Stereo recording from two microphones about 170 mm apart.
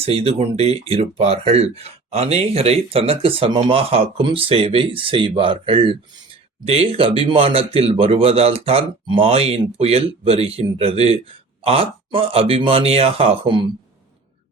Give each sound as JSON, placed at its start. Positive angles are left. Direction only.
{"t": 0.0, "sound": "speech", "side_deg": -35}